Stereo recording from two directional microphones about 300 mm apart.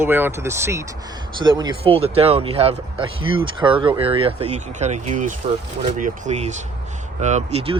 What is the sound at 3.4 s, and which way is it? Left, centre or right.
Speech, centre.